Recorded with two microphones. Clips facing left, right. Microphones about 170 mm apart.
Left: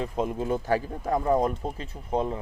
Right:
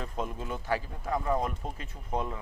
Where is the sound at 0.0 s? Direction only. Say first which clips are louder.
Left 7 dB; 35° left (ahead or behind).